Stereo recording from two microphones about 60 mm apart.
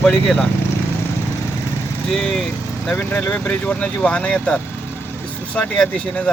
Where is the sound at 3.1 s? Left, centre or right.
Centre.